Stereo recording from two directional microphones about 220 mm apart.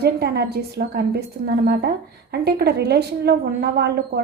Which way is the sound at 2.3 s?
45° right (ahead or behind).